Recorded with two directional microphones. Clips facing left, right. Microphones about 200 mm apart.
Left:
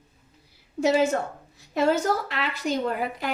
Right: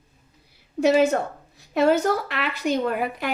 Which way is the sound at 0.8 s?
60° right (ahead or behind).